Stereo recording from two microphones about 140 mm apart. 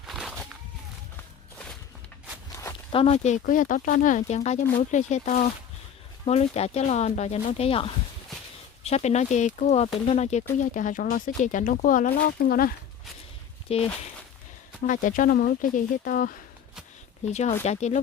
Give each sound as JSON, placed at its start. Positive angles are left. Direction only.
{"t": 0.0, "sound": "a sound", "side_deg": -5}
{"t": 2.9, "sound": "speech", "side_deg": 45}
{"t": 8.8, "sound": "speech", "side_deg": 50}
{"t": 10.6, "sound": "speech", "side_deg": 65}
{"t": 13.7, "sound": "speech", "side_deg": 45}
{"t": 14.8, "sound": "speech", "side_deg": 70}
{"t": 17.2, "sound": "speech", "side_deg": 55}